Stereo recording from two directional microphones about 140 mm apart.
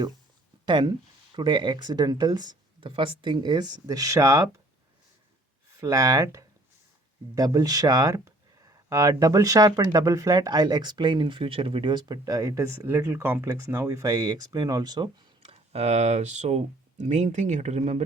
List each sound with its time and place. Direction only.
0.6 s speech: 30° right (ahead or behind)
5.8 s speech: 25° right (ahead or behind)
15.4 s speech: 50° right (ahead or behind)